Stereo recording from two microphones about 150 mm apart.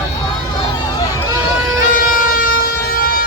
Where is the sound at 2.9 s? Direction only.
75° left (ahead or behind).